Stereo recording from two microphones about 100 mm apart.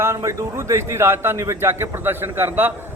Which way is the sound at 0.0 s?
30° right (ahead or behind).